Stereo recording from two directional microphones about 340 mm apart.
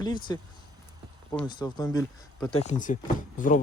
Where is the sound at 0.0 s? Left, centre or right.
Centre.